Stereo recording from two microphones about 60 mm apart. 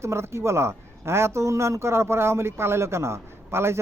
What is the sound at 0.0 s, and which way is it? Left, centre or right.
A man's voice, right.